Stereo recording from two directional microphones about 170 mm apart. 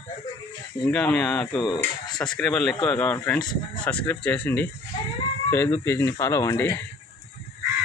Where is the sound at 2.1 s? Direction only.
25° left (ahead or behind).